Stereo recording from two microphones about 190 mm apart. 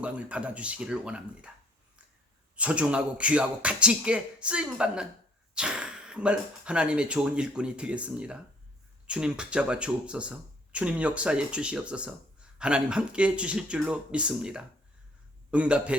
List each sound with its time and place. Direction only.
0.0 s speech: 5° right (ahead or behind)
2.6 s speech: 5° right (ahead or behind)